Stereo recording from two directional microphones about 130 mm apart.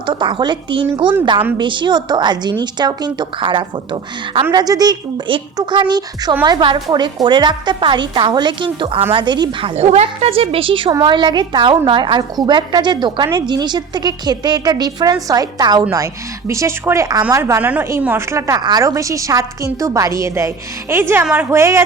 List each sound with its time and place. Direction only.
0.0 s a woman's voice: 40° right (ahead or behind); by 21.8 s 20° right (ahead or behind)